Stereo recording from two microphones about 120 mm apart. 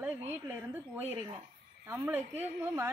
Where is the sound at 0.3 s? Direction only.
15° right (ahead or behind).